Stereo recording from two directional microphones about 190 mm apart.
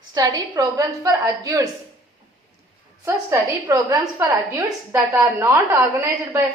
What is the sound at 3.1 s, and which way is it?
A woman's voice, 15° right (ahead or behind).